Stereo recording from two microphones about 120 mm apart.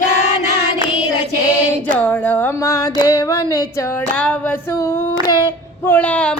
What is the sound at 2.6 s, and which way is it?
Music, 30° left (ahead or behind).